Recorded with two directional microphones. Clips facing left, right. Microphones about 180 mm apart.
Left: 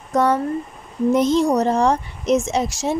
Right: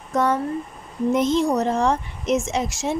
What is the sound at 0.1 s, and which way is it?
A woman's voice, 35° left (ahead or behind).